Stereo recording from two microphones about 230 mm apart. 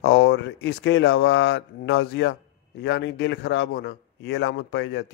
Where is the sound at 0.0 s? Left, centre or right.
Left.